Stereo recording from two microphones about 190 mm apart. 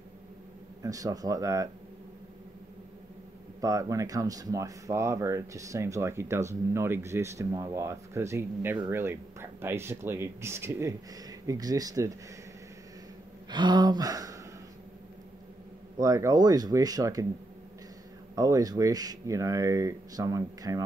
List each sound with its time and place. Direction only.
0.8 s speech: 20° right (ahead or behind)
3.6 s speech: 15° right (ahead or behind)
13.5 s speech: 25° right (ahead or behind)
16.0 s speech: 15° right (ahead or behind)
18.3 s speech: 20° right (ahead or behind)